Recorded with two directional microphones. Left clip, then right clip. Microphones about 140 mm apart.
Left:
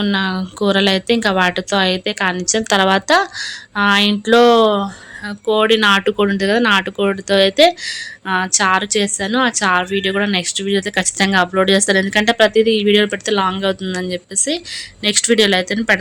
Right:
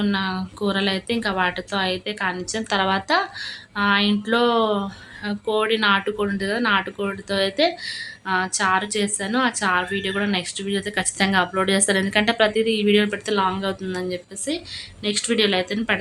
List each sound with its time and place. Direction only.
0.0 s speech: 50° left (ahead or behind)